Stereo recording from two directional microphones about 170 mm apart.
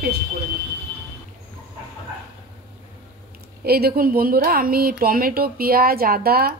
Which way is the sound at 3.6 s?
65° right (ahead or behind).